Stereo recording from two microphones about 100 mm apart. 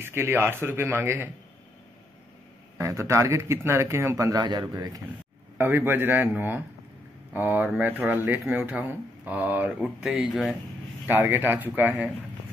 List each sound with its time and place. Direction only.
0.0 s speech: 25° right (ahead or behind)
2.8 s speech: 30° right (ahead or behind)
5.6 s speech: 20° right (ahead or behind); by 10.6 s 5° right (ahead or behind)
11.1 s speech: 20° right (ahead or behind)